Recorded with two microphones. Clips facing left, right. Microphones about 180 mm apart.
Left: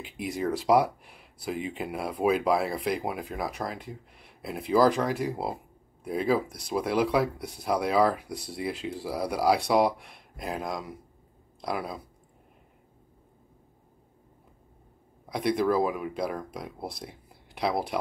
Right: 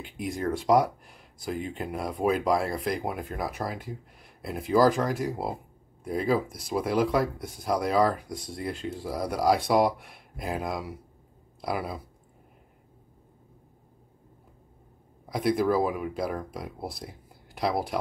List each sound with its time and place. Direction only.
0.0 s speech: centre (ahead or behind)
15.2 s speech: centre (ahead or behind)